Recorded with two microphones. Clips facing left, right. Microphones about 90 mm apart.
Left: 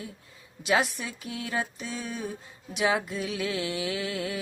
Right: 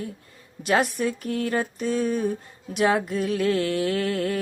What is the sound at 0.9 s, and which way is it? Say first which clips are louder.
Mantra: right 11 dB; 5° left (ahead or behind).